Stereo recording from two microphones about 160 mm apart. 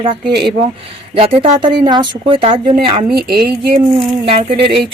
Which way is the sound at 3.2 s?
80° right.